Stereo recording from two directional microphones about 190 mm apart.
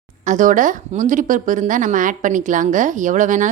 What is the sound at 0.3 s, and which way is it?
A woman's voice, 45° right (ahead or behind).